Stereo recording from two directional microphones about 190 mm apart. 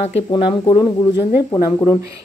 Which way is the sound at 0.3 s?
25° left (ahead or behind).